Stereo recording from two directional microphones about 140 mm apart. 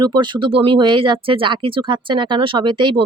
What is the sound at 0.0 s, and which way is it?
Speech, 30° right (ahead or behind).